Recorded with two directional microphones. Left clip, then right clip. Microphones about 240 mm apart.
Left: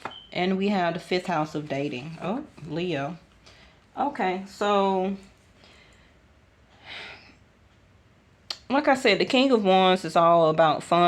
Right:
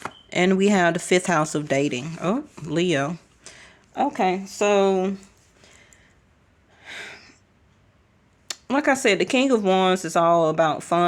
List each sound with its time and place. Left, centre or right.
0.3 s speech: right
4.1 s speech: centre
4.5 s speech: right
6.8 s a sound: right
8.4 s speech: right